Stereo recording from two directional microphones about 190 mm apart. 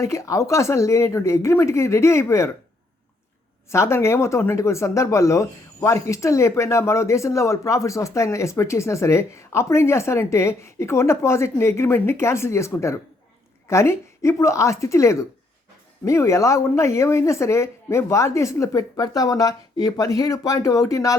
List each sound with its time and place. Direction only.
0.0 s speech: 15° left (ahead or behind)
3.7 s speech: 15° left (ahead or behind)